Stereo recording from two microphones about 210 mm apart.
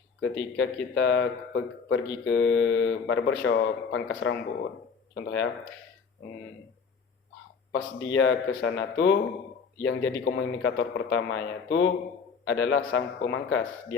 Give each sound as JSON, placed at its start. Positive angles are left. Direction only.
{"t": 0.2, "sound": "speech", "side_deg": 70}
{"t": 7.7, "sound": "speech", "side_deg": 65}
{"t": 9.8, "sound": "speech", "side_deg": 75}